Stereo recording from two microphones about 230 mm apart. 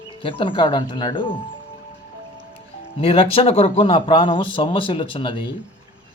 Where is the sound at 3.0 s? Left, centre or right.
Left.